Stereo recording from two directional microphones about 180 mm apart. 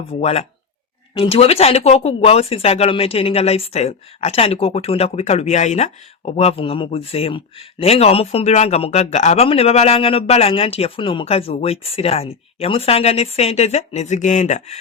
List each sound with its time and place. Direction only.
0.1 s speech: 35° left (ahead or behind)